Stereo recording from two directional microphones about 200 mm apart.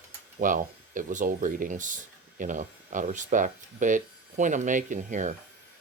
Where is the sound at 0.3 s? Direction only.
40° right (ahead or behind).